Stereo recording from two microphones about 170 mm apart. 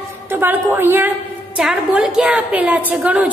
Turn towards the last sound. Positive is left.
turn(degrees=-10)  # may be behind; listen again after turning